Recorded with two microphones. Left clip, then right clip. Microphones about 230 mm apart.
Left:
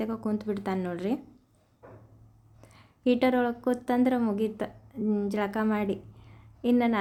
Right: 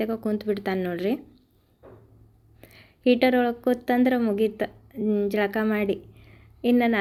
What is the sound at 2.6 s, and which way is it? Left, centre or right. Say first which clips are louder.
A woman's voice: right 5 dB; centre.